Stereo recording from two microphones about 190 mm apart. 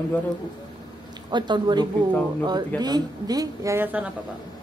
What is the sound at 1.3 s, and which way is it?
A woman's voice, 25° right (ahead or behind).